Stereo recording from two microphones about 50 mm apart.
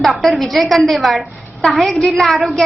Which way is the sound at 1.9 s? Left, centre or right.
Centre.